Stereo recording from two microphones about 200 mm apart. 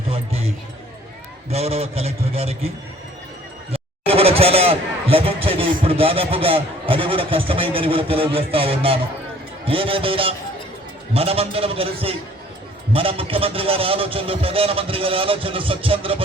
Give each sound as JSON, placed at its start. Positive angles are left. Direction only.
{"t": 0.1, "sound": "music", "side_deg": -30}
{"t": 1.5, "sound": "a man's voice", "side_deg": -30}